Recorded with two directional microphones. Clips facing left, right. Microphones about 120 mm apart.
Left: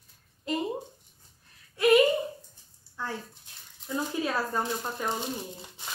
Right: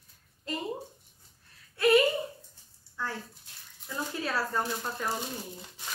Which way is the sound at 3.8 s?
20° left (ahead or behind).